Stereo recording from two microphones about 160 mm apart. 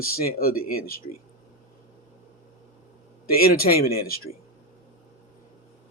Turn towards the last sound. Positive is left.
turn(degrees=70)  # may be behind; listen again after turning